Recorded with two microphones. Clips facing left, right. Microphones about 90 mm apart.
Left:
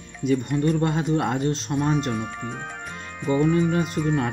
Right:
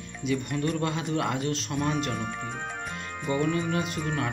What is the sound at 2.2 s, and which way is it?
Speech, centre (ahead or behind).